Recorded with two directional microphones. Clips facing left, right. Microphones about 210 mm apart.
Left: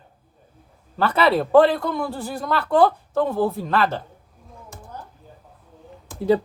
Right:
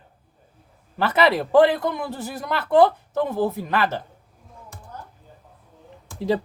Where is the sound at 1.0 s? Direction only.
20° right (ahead or behind).